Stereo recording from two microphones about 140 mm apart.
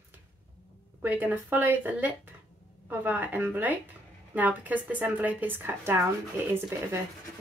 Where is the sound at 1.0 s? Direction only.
10° right (ahead or behind).